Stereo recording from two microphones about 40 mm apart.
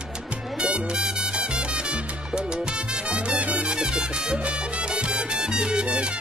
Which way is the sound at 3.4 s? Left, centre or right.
Right.